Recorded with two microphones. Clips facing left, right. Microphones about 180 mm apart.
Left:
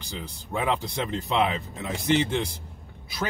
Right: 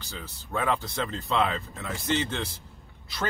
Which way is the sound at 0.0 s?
15° left (ahead or behind).